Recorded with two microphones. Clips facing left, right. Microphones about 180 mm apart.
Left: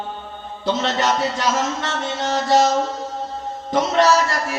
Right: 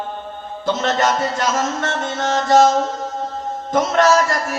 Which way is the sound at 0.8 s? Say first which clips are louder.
Right 4 dB; 45° right (ahead or behind).